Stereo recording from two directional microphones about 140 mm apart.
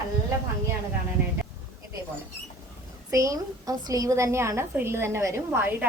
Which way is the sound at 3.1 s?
25° right (ahead or behind).